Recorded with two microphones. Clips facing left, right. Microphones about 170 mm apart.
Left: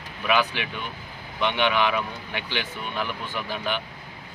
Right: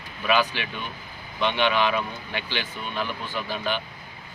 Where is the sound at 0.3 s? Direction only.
15° left (ahead or behind).